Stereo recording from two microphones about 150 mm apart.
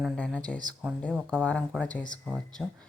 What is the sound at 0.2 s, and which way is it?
Speech, 5° left (ahead or behind).